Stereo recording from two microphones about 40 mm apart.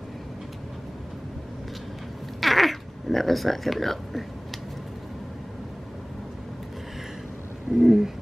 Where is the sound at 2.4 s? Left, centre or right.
Centre.